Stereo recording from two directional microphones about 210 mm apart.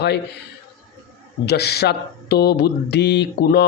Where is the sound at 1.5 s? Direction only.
50° left (ahead or behind).